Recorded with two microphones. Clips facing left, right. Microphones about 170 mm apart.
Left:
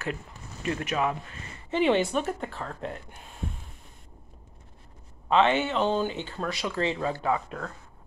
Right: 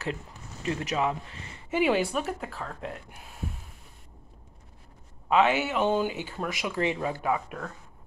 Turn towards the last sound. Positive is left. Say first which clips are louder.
# left 1 dB
turn(degrees=-15)  # may be behind; listen again after turning